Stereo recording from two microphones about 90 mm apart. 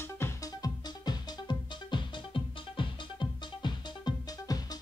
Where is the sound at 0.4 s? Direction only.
50° left (ahead or behind).